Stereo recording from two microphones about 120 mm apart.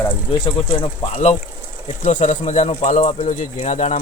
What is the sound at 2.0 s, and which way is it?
Speech, 90° left.